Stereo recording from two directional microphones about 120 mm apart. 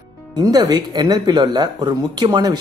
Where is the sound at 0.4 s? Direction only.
35° right (ahead or behind).